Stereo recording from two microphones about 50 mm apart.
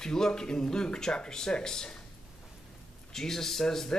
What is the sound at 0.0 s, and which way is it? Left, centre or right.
Speech, centre.